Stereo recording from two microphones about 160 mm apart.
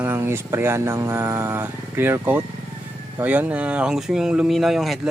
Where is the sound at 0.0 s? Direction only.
15° right (ahead or behind).